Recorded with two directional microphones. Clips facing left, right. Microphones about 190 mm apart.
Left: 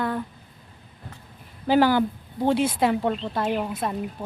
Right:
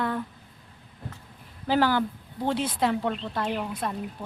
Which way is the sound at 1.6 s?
15° left (ahead or behind).